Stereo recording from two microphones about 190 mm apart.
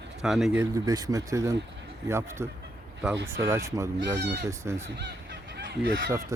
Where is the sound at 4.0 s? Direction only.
65° right (ahead or behind).